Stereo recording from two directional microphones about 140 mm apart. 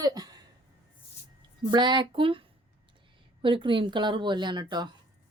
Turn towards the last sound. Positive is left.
turn(degrees=-30)  # may be behind; listen again after turning